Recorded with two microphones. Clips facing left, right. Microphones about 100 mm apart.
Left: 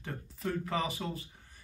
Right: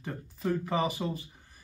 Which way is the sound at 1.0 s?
15° right (ahead or behind).